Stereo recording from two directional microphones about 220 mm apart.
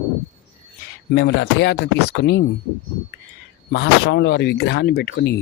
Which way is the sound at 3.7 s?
55° left (ahead or behind).